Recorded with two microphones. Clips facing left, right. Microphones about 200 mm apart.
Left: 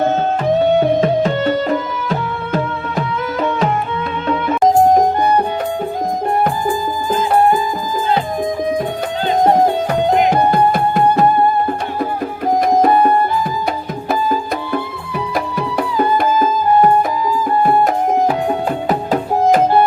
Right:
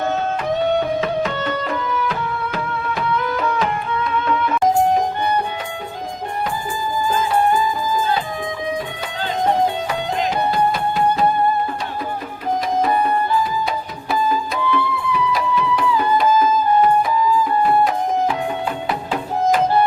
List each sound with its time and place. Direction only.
0.8 s music: 35° left (ahead or behind)
6.4 s music: 50° left (ahead or behind)
9.4 s music: 50° left (ahead or behind)
12.5 s music: 50° left (ahead or behind)
18.9 s music: 40° left (ahead or behind)